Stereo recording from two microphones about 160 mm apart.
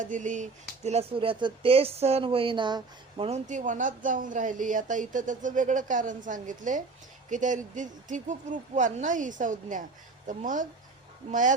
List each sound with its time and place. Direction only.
0.0 s speech: 55° right (ahead or behind)
0.9 s speech: 40° right (ahead or behind)
3.2 s speech: 45° right (ahead or behind)